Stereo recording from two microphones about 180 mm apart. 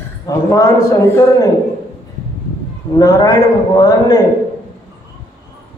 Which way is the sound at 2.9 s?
20° left (ahead or behind).